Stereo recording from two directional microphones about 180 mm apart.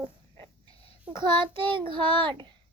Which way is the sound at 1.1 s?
25° right (ahead or behind).